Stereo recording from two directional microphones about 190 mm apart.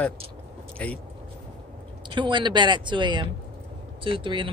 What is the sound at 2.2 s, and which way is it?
Speech, 25° right (ahead or behind).